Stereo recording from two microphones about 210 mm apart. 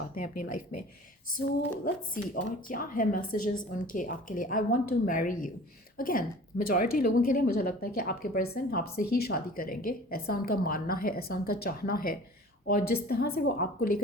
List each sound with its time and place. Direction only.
0.1 s a woman's voice: 40° left (ahead or behind)
2.3 s a woman's voice: 40° left (ahead or behind)